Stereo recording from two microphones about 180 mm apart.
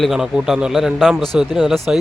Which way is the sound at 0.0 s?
5° right (ahead or behind).